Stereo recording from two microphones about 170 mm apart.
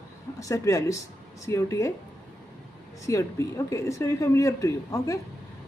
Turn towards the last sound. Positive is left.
turn(degrees=20)  # may be behind; listen again after turning